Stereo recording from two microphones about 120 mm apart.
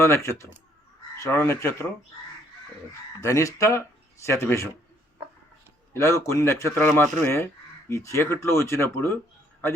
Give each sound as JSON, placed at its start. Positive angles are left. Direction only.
{"t": 0.0, "sound": "speech", "side_deg": 20}
{"t": 3.2, "sound": "speech", "side_deg": 25}
{"t": 5.9, "sound": "speech", "side_deg": 25}